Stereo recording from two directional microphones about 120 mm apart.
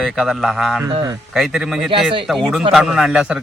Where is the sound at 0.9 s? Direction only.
40° right (ahead or behind).